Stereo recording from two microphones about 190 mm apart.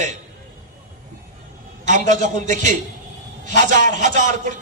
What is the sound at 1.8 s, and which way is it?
A man's voice, 40° right (ahead or behind).